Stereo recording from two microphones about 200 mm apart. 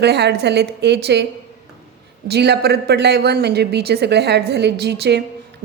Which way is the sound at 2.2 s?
55° right (ahead or behind).